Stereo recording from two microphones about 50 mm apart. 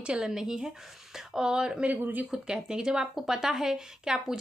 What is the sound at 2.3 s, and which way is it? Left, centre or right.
A woman's voice, centre.